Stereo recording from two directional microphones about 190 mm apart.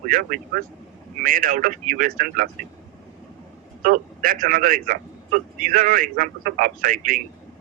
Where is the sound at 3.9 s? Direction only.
50° right (ahead or behind).